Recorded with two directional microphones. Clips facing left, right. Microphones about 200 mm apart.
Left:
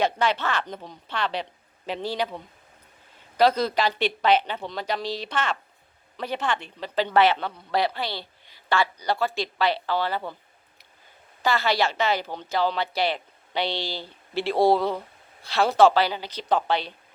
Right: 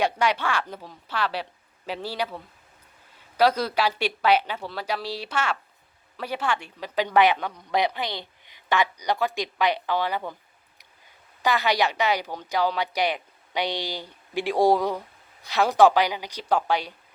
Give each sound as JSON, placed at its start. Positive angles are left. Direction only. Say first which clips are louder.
{"t": 0.0, "sound": "a woman's voice", "louder": "even", "side_deg": -10}
{"t": 3.3, "sound": "a woman's voice", "louder": "left 1 dB", "side_deg": -10}
{"t": 11.4, "sound": "a woman's voice", "louder": "even", "side_deg": -15}